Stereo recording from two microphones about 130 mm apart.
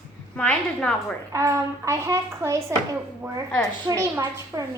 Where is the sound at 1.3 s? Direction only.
25° right (ahead or behind).